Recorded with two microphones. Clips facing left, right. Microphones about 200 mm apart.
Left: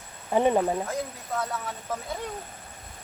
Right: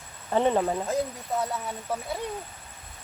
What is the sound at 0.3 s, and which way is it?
Speech, 10° left (ahead or behind).